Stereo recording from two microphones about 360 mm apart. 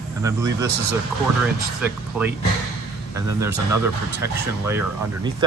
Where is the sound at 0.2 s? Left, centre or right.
Centre.